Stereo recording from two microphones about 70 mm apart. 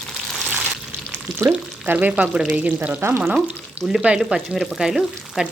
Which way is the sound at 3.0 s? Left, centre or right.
Right.